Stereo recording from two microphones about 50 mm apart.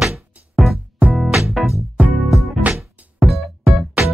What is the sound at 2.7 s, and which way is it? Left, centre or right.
Music, right.